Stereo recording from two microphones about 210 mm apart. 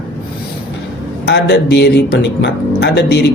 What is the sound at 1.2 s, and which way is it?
Speech, 55° left (ahead or behind).